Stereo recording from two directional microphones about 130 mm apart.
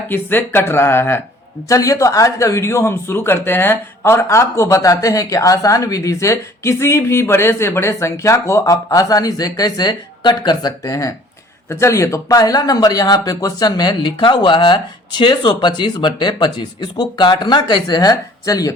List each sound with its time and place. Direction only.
0.1 s speech: 15° left (ahead or behind)